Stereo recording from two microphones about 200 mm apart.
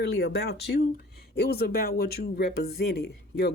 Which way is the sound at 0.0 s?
55° left (ahead or behind).